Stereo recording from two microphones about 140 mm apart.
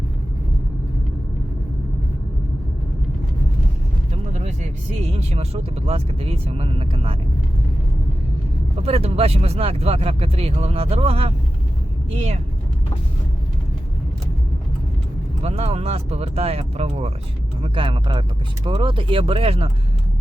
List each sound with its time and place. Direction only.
4.3 s vehicle: 55° right (ahead or behind)
4.9 s speech: 50° right (ahead or behind)
8.8 s speech: 45° right (ahead or behind)
15.4 s speech: 45° right (ahead or behind)